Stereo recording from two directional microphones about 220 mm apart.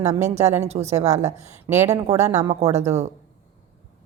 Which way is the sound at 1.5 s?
10° right (ahead or behind).